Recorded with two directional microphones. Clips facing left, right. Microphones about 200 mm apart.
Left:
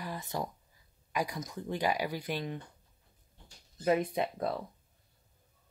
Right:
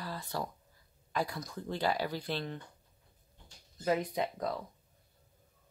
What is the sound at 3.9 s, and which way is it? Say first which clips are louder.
Speech: left 3 dB; 25° left (ahead or behind).